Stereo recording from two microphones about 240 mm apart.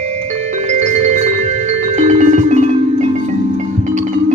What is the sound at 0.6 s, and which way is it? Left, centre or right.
Music, right.